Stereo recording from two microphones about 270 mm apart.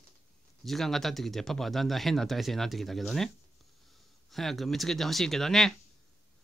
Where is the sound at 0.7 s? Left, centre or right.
Centre.